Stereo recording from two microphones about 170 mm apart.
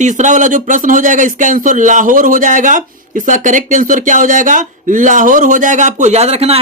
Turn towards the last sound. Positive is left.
turn(degrees=-35)  # may be behind; listen again after turning